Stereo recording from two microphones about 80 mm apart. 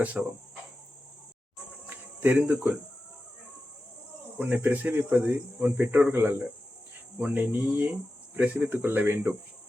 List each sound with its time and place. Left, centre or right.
0.0 s speech: centre
1.9 s cricket: centre
4.4 s speech: right